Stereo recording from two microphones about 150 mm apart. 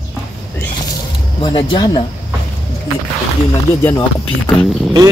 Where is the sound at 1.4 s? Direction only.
30° left (ahead or behind).